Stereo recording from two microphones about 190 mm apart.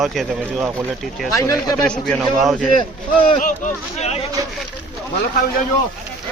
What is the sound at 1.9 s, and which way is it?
Speech, centre (ahead or behind).